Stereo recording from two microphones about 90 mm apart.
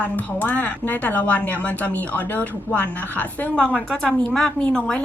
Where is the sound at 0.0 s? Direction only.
20° left (ahead or behind).